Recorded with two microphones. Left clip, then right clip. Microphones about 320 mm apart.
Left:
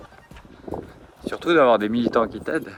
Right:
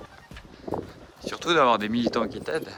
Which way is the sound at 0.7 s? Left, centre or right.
Left.